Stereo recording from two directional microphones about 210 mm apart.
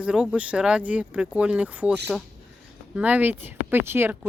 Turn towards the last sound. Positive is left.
turn(degrees=-10)  # may be behind; listen again after turning